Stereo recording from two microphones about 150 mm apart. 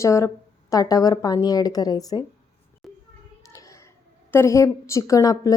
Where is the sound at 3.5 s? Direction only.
20° left (ahead or behind).